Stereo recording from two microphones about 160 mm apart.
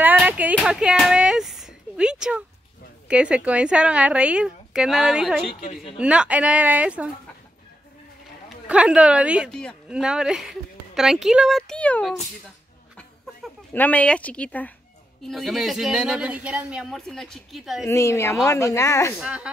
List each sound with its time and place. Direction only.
0.0 s a sound: 10° right (ahead or behind)
0.7 s a woman's voice: 5° right (ahead or behind)
8.5 s speech: 5° right (ahead or behind)
9.5 s a woman's voice: 5° left (ahead or behind)
9.8 s a woman's voice: 5° right (ahead or behind)
12.9 s a sound: 10° left (ahead or behind)
15.2 s a woman's voice: centre (ahead or behind)
17.8 s speech: 20° left (ahead or behind)
19.1 s a woman's voice: 5° right (ahead or behind)